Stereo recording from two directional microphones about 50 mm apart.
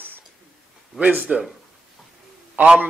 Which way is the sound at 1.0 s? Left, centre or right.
Right.